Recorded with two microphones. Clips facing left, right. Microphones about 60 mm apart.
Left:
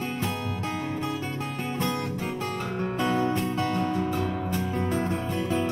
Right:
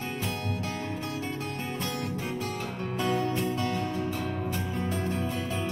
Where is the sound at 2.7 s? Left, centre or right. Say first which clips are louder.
Left 3 dB; left.